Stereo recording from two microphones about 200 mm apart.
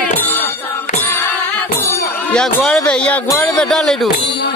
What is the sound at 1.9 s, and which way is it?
Speech, 5° left (ahead or behind).